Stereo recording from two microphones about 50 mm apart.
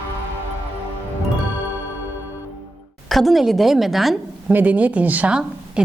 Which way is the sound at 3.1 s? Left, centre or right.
Centre.